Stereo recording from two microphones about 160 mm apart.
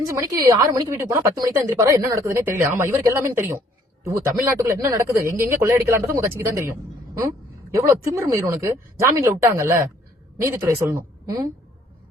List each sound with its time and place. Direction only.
0.0 s a woman's voice: 20° right (ahead or behind)